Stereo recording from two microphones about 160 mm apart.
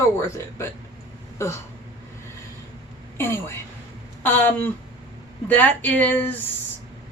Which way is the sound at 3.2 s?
15° left (ahead or behind).